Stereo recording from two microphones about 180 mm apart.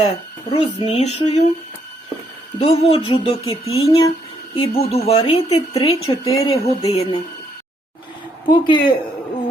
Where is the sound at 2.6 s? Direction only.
30° left (ahead or behind).